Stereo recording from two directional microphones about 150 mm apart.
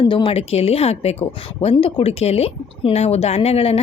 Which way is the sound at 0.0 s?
35° left (ahead or behind).